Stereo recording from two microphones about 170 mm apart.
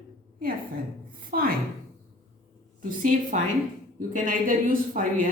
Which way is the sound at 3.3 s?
45° right (ahead or behind).